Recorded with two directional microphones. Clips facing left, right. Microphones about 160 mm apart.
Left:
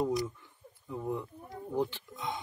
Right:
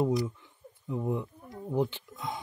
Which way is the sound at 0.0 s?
15° right (ahead or behind).